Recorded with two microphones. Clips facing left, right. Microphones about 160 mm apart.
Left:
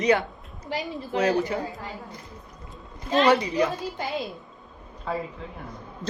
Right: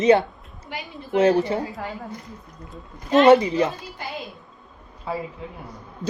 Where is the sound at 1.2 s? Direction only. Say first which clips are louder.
Right 5 dB; 30° right (ahead or behind).